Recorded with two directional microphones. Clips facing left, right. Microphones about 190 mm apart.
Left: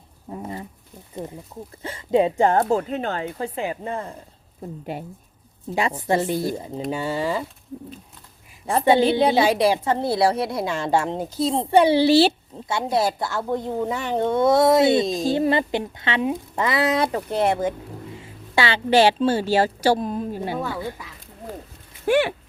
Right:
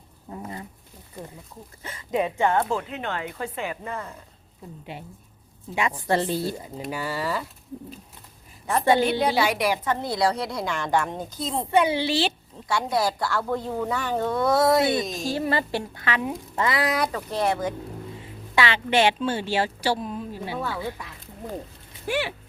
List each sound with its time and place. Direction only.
0.3 s a sound: 25° left (ahead or behind)
1.8 s speech: 30° left (ahead or behind)
4.9 s speech: 45° left (ahead or behind)
5.7 s speech: 35° left (ahead or behind)
6.0 s a woman's voice: 15° left (ahead or behind)
6.9 s speech: 25° left (ahead or behind)
8.9 s speech: 30° left (ahead or behind)
12.6 s speech: 25° left (ahead or behind); by 20.6 s 50° left (ahead or behind)
22.0 s a sound: 55° left (ahead or behind)